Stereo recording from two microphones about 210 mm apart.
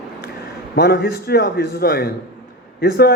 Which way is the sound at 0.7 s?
45° left (ahead or behind).